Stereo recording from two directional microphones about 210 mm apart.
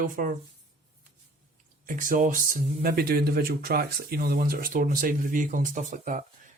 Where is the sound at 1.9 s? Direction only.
40° right (ahead or behind).